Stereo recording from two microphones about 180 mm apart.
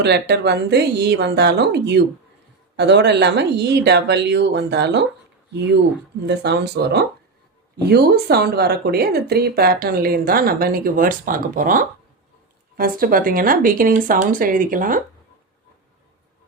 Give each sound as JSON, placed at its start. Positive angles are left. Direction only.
{"t": 0.0, "sound": "speech", "side_deg": -70}
{"t": 6.2, "sound": "speech", "side_deg": -70}